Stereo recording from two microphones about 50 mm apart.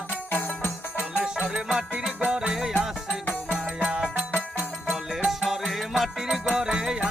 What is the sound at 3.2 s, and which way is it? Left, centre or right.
Music, left.